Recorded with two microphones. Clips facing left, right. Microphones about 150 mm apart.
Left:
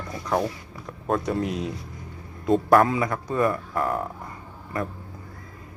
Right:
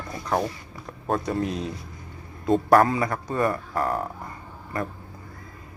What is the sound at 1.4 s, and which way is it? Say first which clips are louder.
Speech: left 1 dB; 15° left (ahead or behind).